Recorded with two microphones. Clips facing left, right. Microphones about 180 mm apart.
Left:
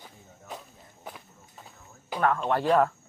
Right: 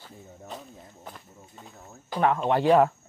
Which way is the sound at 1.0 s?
5° left (ahead or behind).